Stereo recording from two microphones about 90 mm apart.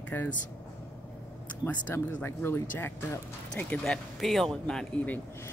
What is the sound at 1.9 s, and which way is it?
Speech, 25° left (ahead or behind).